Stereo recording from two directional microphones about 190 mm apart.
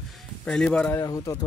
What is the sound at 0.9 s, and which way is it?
Speech, 15° left (ahead or behind).